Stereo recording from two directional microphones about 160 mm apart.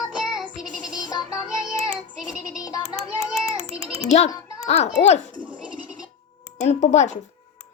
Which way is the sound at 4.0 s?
45° left (ahead or behind).